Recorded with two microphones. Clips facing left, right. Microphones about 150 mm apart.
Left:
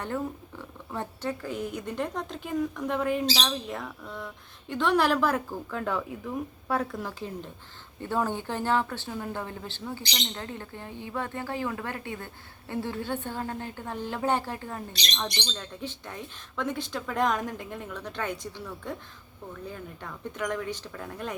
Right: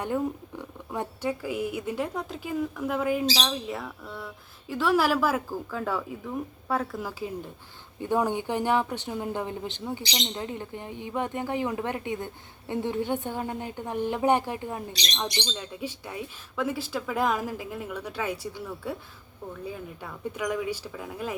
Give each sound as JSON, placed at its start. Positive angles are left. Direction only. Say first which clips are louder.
{"t": 0.6, "sound": "a woman's voice", "louder": "right 2 dB", "side_deg": -15}